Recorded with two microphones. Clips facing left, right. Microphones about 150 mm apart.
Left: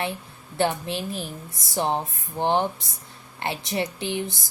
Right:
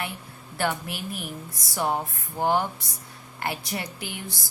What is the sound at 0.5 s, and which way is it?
Speech, 25° left (ahead or behind).